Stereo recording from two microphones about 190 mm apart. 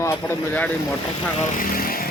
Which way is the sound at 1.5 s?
45° left (ahead or behind).